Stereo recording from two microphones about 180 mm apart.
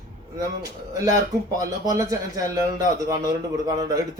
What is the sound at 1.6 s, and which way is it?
A man's voice, 15° right (ahead or behind).